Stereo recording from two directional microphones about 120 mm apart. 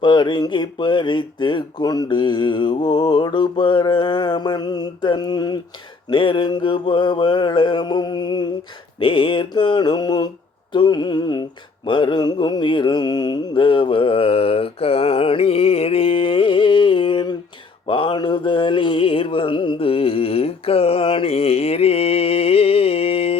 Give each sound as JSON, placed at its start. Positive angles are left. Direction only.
{"t": 0.0, "sound": "speech", "side_deg": 40}
{"t": 11.9, "sound": "mantra", "side_deg": 40}